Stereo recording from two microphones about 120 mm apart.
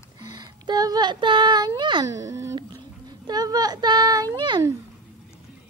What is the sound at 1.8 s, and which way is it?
Music, 40° right (ahead or behind).